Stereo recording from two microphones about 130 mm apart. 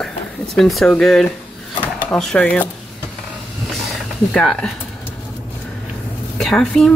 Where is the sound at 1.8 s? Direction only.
10° left (ahead or behind).